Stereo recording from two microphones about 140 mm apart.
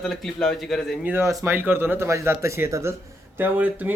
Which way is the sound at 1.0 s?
15° right (ahead or behind).